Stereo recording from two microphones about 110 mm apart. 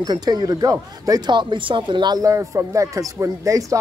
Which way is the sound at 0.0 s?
40° right (ahead or behind).